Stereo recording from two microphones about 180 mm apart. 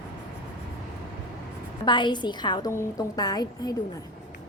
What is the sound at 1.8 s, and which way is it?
A woman's voice, 25° left (ahead or behind).